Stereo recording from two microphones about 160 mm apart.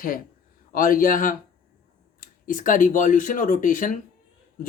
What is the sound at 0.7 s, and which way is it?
Speech, 60° left (ahead or behind).